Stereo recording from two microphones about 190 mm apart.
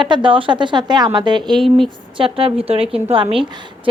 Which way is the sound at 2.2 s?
30° right (ahead or behind).